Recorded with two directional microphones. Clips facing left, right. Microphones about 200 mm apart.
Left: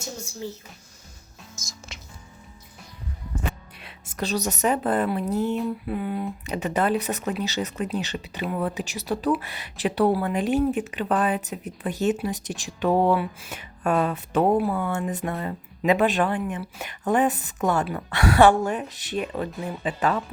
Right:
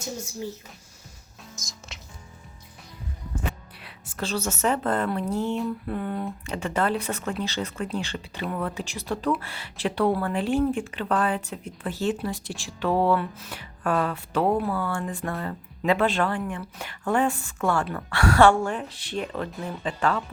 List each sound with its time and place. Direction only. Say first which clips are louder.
1.9 s music: left 1 dB; centre (ahead or behind)
3.8 s speech: left 2 dB; 20° left (ahead or behind)